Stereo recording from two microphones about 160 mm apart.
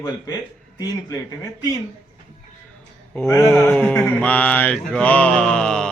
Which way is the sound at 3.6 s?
5° left (ahead or behind).